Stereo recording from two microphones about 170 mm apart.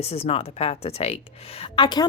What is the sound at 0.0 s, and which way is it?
A woman's voice, 35° left (ahead or behind).